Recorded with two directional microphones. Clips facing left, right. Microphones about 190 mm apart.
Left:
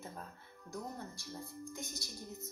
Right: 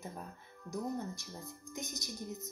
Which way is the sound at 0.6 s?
20° right (ahead or behind).